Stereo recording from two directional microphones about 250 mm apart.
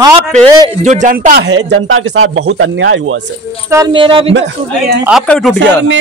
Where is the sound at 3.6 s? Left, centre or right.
Centre.